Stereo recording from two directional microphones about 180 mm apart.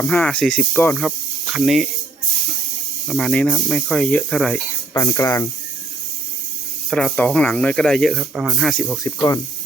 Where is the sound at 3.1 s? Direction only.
Centre (ahead or behind).